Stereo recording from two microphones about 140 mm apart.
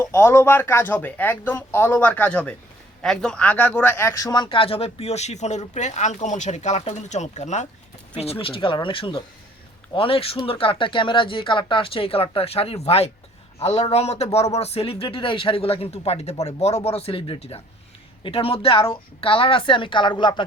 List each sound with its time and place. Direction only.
0.0 s a man's voice: 20° left (ahead or behind); by 7.7 s 55° left (ahead or behind)
8.2 s a man's voice: 45° left (ahead or behind)